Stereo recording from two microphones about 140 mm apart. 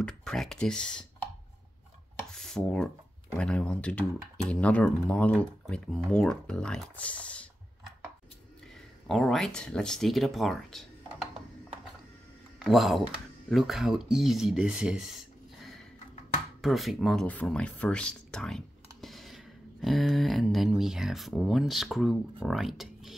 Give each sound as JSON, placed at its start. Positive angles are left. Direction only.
{"t": 0.0, "sound": "speech", "side_deg": 5}
{"t": 2.3, "sound": "a sound", "side_deg": 5}
{"t": 3.3, "sound": "speech", "side_deg": 10}
{"t": 9.0, "sound": "speech", "side_deg": 0}
{"t": 12.5, "sound": "speech", "side_deg": 0}
{"t": 16.6, "sound": "speech", "side_deg": 0}